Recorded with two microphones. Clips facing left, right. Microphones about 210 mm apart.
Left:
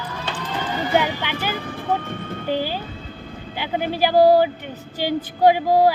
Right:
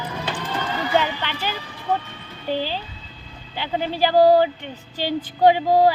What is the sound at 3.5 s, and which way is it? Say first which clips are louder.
Speech: left 1 dB; 10° left (ahead or behind).